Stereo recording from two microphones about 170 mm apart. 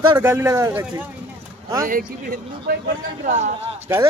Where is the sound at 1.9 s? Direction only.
60° right (ahead or behind).